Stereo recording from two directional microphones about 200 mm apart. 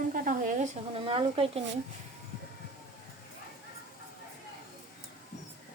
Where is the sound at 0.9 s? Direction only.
25° right (ahead or behind).